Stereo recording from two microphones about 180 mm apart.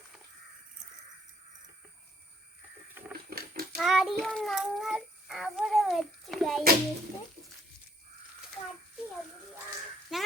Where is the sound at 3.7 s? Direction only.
Centre (ahead or behind).